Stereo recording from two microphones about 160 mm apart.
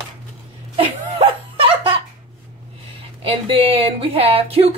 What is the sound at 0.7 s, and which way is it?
Laughter, 35° right (ahead or behind).